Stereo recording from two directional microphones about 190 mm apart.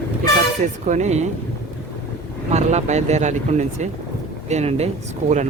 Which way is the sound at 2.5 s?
35° right (ahead or behind).